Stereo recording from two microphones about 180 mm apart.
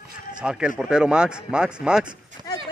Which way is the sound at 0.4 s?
5° right (ahead or behind).